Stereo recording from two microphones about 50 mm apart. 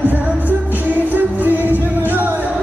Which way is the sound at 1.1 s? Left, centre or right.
Right.